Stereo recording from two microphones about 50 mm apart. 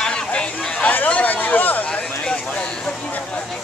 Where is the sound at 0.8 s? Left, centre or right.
Left.